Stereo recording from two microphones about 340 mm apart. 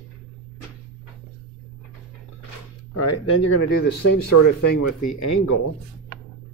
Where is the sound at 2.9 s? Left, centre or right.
Left.